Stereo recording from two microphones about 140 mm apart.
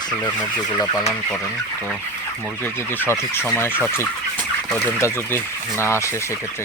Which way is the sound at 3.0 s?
15° left (ahead or behind).